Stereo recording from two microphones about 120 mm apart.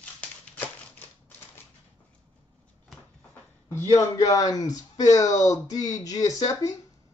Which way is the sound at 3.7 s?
25° left (ahead or behind).